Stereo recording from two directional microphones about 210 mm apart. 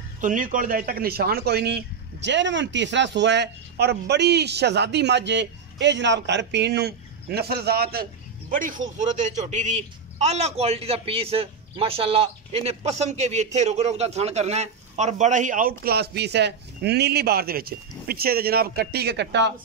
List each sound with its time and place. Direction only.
0.2 s a man's voice: 40° right (ahead or behind); by 19.5 s 55° right (ahead or behind)